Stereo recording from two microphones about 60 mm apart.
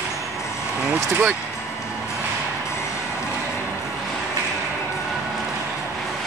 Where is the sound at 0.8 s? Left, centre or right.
Right.